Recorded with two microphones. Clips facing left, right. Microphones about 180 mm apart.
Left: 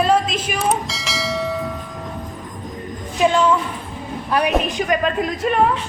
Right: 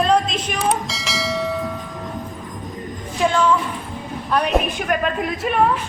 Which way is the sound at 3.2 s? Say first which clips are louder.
Left 2 dB; 20° left (ahead or behind).